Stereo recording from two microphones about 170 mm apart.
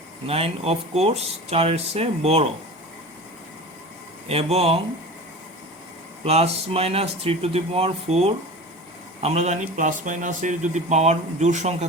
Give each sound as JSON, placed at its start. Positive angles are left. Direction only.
{"t": 0.3, "sound": "speech", "side_deg": -35}
{"t": 4.3, "sound": "speech", "side_deg": -35}
{"t": 6.2, "sound": "speech", "side_deg": -35}